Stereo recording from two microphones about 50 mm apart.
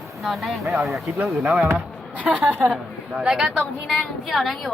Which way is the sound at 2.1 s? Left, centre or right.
Right.